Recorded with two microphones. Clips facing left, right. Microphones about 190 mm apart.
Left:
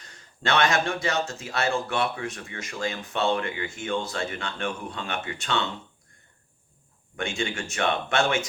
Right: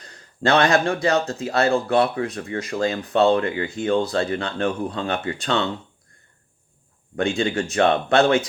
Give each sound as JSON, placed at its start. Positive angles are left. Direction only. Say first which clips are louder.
{"t": 0.0, "sound": "speech", "louder": "right 9 dB", "side_deg": -35}
{"t": 7.2, "sound": "speech", "louder": "right 8 dB", "side_deg": -35}